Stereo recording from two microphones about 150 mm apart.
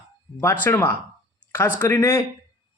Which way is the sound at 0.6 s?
15° left (ahead or behind).